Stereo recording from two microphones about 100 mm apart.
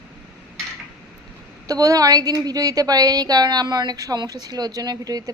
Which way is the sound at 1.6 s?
35° right (ahead or behind).